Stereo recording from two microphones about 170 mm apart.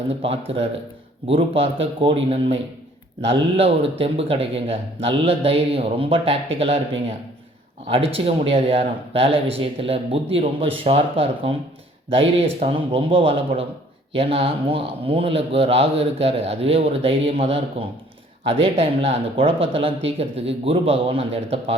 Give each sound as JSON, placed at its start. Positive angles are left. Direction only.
{"t": 0.1, "sound": "speech", "side_deg": -35}
{"t": 7.9, "sound": "speech", "side_deg": -35}